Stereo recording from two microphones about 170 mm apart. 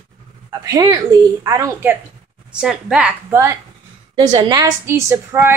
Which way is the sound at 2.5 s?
5° right (ahead or behind).